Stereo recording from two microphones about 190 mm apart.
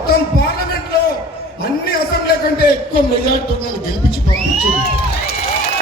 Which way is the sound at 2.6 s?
55° left (ahead or behind).